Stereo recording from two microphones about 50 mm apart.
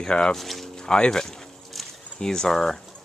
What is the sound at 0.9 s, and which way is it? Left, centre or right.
Speech, centre.